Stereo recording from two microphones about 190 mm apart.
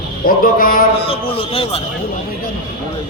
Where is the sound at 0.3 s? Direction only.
50° left (ahead or behind).